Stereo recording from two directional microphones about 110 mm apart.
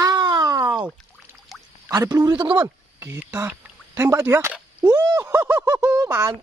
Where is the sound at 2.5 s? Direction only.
25° right (ahead or behind).